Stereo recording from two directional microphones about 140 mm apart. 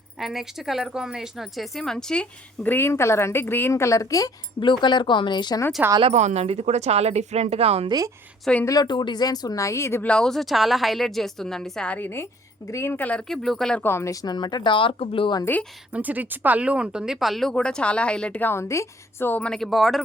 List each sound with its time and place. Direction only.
0.2 s speech: centre (ahead or behind)
2.6 s a woman's voice: 15° left (ahead or behind); by 5.6 s 30° left (ahead or behind)
6.0 s speech: 50° right (ahead or behind)
7.9 s a woman's voice: 25° right (ahead or behind)
8.6 s speech: 25° left (ahead or behind); by 13.8 s 5° left (ahead or behind)
13.8 s speech: 20° left (ahead or behind); by 15.4 s 40° left (ahead or behind)
15.9 s speech: 10° right (ahead or behind)